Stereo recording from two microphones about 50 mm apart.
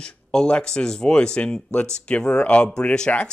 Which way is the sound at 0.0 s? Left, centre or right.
Centre.